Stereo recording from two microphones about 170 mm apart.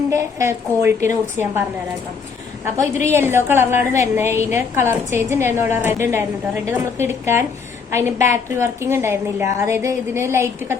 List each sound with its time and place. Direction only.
0.1 s a woman's voice: 20° right (ahead or behind)
2.7 s a woman's voice: 15° right (ahead or behind)